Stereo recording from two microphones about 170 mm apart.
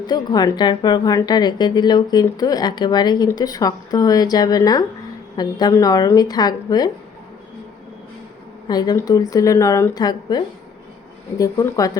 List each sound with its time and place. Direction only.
0.1 s a woman's voice: 25° left (ahead or behind)
8.6 s a woman's voice: 25° left (ahead or behind)